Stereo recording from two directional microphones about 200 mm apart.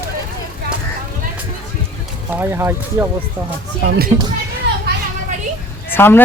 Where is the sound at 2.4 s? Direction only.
10° right (ahead or behind).